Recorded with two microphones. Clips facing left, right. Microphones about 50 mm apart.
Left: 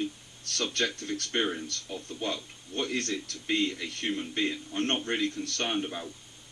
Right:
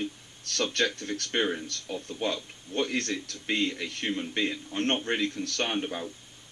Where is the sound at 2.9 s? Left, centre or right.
Right.